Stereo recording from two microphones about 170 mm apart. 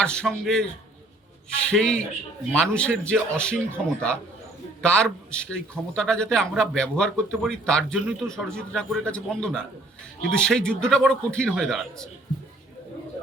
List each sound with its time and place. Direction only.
0.0 s a man's voice: 5° left (ahead or behind)